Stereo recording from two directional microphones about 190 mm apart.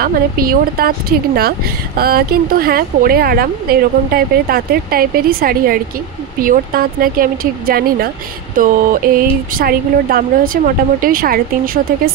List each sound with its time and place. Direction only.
0.0 s speech: 50° right (ahead or behind)